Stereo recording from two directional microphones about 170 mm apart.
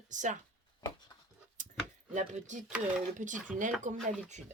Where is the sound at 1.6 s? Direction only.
50° right (ahead or behind).